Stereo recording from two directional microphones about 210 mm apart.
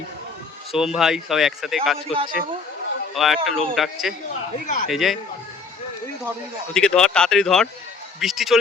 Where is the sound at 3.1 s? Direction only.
Centre (ahead or behind).